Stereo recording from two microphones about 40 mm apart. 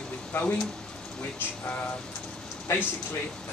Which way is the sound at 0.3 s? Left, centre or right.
Left.